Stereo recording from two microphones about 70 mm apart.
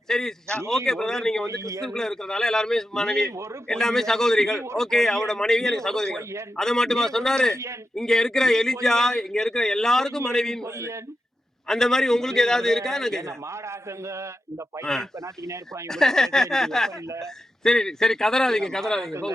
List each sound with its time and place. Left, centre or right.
0.1 s a man's voice: centre
1.5 s a man's voice: right
1.8 s a man's voice: centre
11.7 s a man's voice: centre
13.2 s a man's voice: right
14.9 s a man's voice: centre